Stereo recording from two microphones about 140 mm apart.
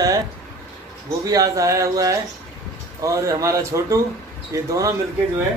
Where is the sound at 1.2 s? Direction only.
25° right (ahead or behind).